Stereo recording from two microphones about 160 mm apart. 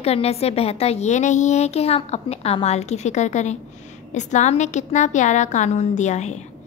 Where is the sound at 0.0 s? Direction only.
40° left (ahead or behind).